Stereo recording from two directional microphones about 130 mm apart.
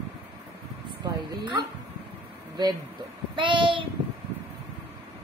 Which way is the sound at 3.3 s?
40° right (ahead or behind).